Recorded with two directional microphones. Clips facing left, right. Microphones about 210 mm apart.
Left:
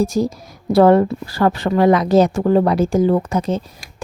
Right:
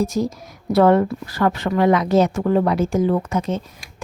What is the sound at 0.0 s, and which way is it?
Speech, 35° left (ahead or behind).